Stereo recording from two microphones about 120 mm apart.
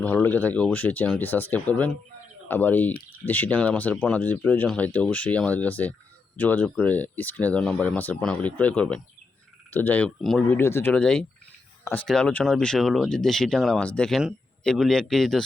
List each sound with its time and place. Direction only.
0.0 s speech: 15° left (ahead or behind)
10.6 s speech: 20° left (ahead or behind)
10.9 s speech: 5° left (ahead or behind)